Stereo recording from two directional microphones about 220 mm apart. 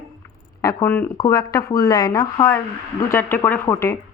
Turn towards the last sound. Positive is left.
turn(degrees=15)  # may be behind; listen again after turning